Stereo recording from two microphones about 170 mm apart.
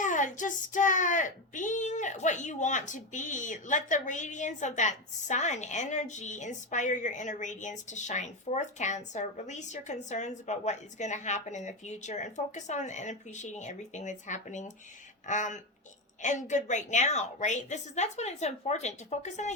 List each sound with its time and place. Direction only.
0.0 s a child's voice: 50° left (ahead or behind)